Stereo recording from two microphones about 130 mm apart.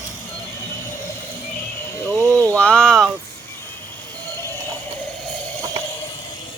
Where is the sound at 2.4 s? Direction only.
10° left (ahead or behind).